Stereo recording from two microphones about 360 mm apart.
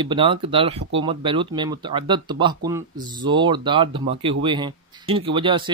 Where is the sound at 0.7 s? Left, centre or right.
Right.